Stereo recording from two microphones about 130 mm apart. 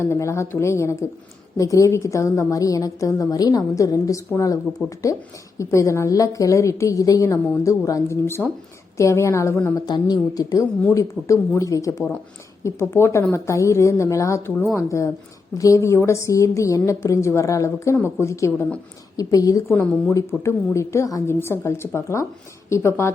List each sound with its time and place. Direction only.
0.0 s a woman's voice: 20° left (ahead or behind)